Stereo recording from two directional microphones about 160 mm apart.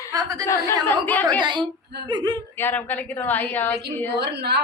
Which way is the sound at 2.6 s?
10° left (ahead or behind).